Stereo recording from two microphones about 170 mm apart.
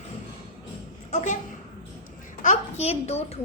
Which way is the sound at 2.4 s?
45° left (ahead or behind).